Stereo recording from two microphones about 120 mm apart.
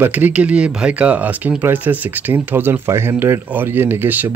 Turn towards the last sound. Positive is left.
turn(degrees=-15)  # may be behind; listen again after turning